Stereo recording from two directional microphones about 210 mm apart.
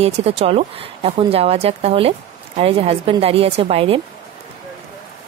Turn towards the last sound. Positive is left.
turn(degrees=-25)  # may be behind; listen again after turning